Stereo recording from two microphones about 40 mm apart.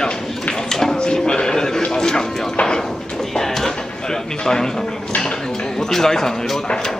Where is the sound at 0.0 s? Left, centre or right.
Centre.